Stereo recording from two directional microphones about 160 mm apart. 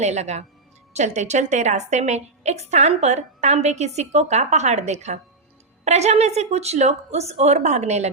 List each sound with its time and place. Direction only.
0.0 s a woman's voice: 45° right (ahead or behind)